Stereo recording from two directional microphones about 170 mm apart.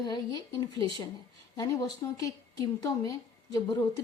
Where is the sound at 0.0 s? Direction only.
25° left (ahead or behind).